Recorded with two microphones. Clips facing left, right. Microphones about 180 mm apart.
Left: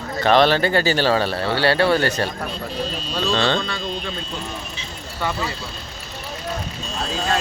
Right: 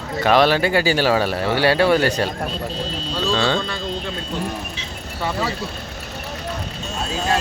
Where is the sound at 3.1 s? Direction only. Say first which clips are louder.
Right 1 dB; 15° left (ahead or behind).